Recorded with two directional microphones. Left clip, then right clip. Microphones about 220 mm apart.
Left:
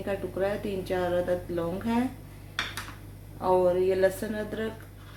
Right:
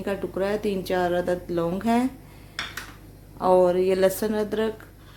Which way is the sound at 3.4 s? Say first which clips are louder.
Right 4 dB; 55° right (ahead or behind).